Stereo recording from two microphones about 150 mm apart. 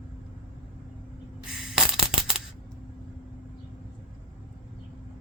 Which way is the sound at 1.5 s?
5° right (ahead or behind).